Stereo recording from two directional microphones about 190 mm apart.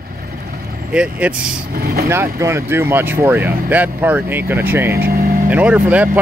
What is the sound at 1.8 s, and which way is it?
Speech, 55° right (ahead or behind).